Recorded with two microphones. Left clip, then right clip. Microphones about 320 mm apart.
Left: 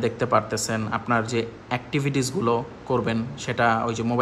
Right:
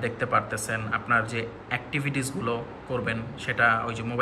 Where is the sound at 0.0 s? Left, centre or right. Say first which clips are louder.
Left 4 dB; centre.